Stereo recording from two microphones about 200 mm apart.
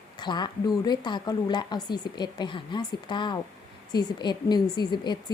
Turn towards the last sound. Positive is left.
turn(degrees=20)  # may be behind; listen again after turning